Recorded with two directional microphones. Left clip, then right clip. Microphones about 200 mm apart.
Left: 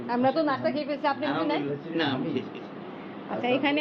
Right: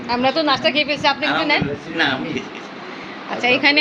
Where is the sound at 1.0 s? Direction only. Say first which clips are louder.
Right 9 dB; 15° right (ahead or behind).